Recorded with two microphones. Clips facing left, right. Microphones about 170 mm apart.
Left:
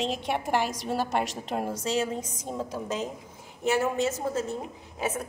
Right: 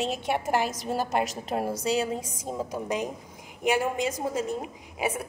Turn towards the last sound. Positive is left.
turn(degrees=-10)  # may be behind; listen again after turning